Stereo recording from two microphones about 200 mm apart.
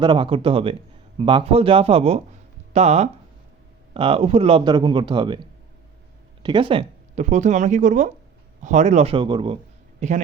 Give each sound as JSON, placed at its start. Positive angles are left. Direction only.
{"t": 0.0, "sound": "a man's voice", "side_deg": -25}
{"t": 10.0, "sound": "speech", "side_deg": -35}